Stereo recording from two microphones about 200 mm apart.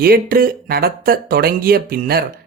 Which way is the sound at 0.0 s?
45° right (ahead or behind).